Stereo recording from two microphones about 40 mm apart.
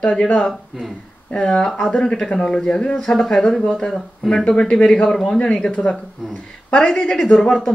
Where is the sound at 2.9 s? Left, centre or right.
Centre.